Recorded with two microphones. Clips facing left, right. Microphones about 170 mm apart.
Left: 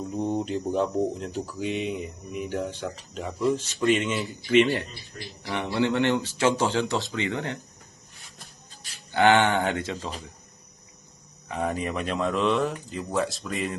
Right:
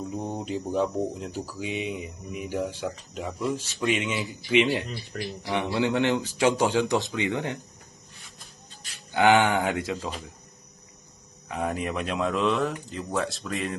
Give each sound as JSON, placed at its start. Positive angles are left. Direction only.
{"t": 0.0, "sound": "speech", "side_deg": -10}
{"t": 4.5, "sound": "speech", "side_deg": -15}
{"t": 9.1, "sound": "speech", "side_deg": -15}
{"t": 11.4, "sound": "speech", "side_deg": 0}